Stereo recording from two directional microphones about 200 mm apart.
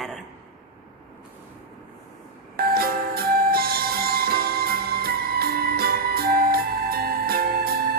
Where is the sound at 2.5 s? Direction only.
50° right (ahead or behind).